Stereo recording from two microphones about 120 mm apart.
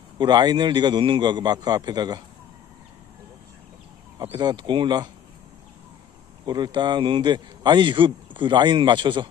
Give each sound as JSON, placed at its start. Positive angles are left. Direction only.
{"t": 0.2, "sound": "a man's voice", "side_deg": -35}
{"t": 4.2, "sound": "a man's voice", "side_deg": -35}
{"t": 6.4, "sound": "a man's voice", "side_deg": -35}